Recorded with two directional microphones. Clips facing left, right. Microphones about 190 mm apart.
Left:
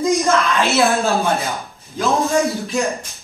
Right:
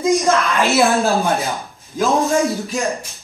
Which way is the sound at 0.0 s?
15° right (ahead or behind).